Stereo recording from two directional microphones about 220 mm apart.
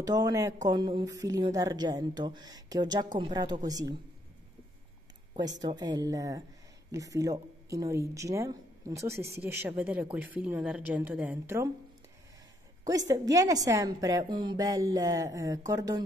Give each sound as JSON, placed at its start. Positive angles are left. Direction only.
{"t": 0.0, "sound": "a woman's voice", "side_deg": -15}
{"t": 5.3, "sound": "a woman's voice", "side_deg": -20}
{"t": 12.8, "sound": "a woman's voice", "side_deg": -15}